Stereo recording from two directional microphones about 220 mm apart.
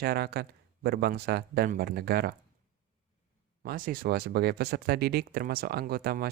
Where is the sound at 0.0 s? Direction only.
45° right (ahead or behind).